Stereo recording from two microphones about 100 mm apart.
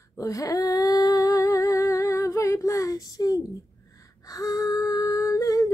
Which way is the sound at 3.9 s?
35° left (ahead or behind).